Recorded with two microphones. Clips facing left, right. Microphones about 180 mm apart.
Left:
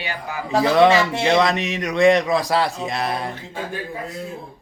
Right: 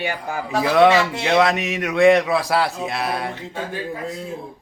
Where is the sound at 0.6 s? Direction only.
5° right (ahead or behind).